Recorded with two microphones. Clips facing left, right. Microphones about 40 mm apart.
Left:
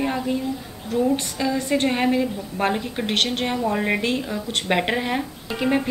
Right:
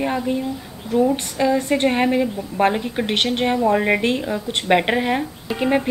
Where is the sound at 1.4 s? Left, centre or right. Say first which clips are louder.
Right 6 dB; centre.